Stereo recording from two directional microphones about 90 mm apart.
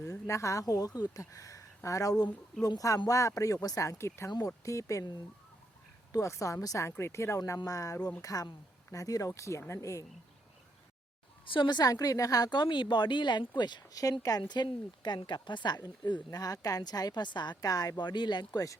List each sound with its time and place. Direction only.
0.0 s a woman's voice: 35° left (ahead or behind)
6.1 s a woman's voice: 35° left (ahead or behind)
11.4 s speech: 65° left (ahead or behind); by 12.5 s 40° left (ahead or behind)
12.5 s speech: 60° left (ahead or behind)
14.0 s speech: 40° left (ahead or behind)
16.3 s speech: 40° left (ahead or behind)